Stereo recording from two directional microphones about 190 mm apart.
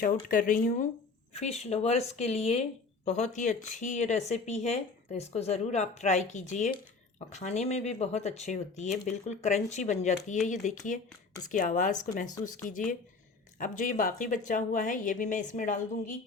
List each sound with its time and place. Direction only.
0.0 s a woman's voice: 45° left (ahead or behind)